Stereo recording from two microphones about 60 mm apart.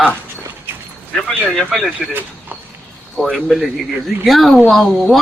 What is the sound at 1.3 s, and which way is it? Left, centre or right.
Speech, centre.